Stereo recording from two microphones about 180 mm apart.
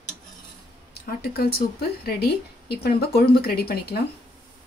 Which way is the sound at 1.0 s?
60° left (ahead or behind).